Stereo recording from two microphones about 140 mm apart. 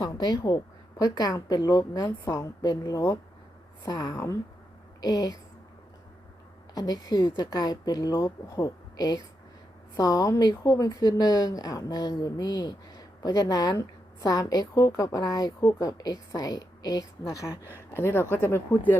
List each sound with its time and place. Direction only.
0.0 s speech: 30° left (ahead or behind)
6.7 s speech: 25° left (ahead or behind)